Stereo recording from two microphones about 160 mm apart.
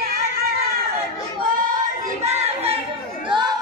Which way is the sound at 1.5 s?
55° right (ahead or behind).